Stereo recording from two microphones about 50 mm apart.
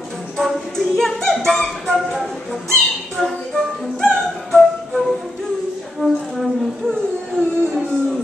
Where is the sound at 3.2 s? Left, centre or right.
Centre.